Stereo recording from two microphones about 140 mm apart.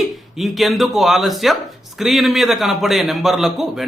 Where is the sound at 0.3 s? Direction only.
Centre (ahead or behind).